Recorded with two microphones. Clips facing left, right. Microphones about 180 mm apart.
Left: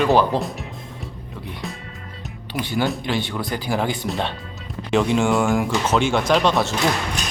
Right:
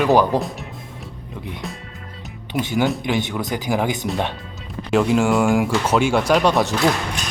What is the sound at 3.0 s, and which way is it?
Speech, 15° right (ahead or behind).